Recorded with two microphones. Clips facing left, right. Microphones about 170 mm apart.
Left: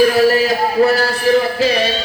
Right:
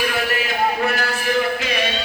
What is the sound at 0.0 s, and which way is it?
Music, 35° left (ahead or behind).